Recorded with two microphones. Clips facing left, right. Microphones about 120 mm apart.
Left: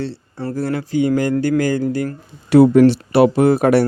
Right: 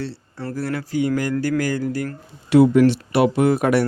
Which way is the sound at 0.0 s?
25° left (ahead or behind).